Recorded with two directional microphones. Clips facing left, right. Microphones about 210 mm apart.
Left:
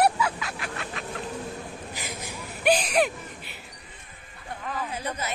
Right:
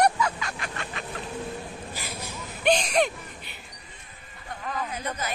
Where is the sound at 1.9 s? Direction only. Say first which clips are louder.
Even; 15° left (ahead or behind).